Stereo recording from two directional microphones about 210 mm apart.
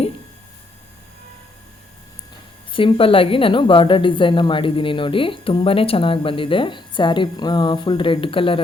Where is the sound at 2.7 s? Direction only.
25° left (ahead or behind).